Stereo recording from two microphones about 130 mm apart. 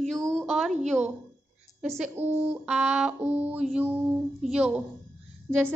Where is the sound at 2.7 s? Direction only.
5° right (ahead or behind).